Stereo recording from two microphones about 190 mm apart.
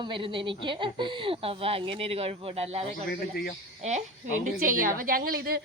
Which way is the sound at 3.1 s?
55° left (ahead or behind).